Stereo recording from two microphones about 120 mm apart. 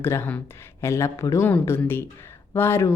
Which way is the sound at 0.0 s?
20° left (ahead or behind).